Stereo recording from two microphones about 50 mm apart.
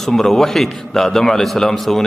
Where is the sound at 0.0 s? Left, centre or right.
Centre.